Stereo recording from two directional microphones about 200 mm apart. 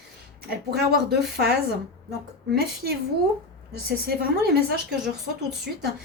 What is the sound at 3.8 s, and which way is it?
Speech, 50° right (ahead or behind).